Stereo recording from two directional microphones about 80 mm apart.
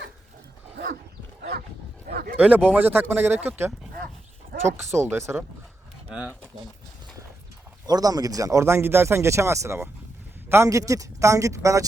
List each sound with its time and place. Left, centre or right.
2.4 s speech: centre; by 5.4 s right
7.9 s speech: right